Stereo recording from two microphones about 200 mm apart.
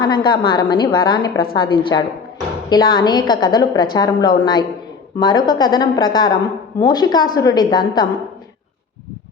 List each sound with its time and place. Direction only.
0.0 s a woman's voice: 20° left (ahead or behind)